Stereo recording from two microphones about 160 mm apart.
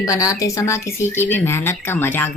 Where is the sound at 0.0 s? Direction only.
20° left (ahead or behind).